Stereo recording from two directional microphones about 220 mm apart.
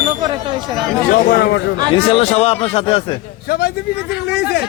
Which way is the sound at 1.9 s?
25° left (ahead or behind).